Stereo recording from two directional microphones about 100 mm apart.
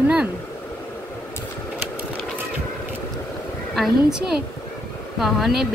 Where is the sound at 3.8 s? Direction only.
5° right (ahead or behind).